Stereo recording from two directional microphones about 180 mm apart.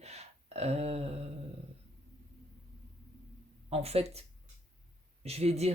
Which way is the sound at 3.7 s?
35° right (ahead or behind).